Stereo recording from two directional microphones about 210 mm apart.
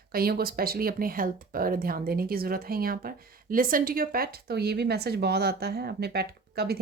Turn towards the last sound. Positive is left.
turn(degrees=-50)  # may be behind; listen again after turning